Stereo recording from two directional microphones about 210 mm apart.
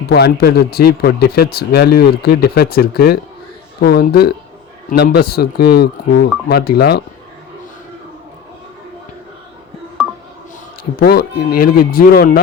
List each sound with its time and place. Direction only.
0.1 s speech: 50° left (ahead or behind)
10.9 s speech: 45° left (ahead or behind)